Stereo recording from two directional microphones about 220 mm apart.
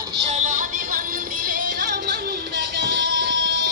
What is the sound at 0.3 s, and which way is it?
Music, 35° right (ahead or behind).